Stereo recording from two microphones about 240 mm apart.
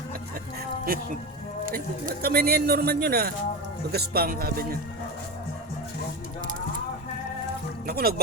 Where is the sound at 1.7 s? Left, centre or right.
Right.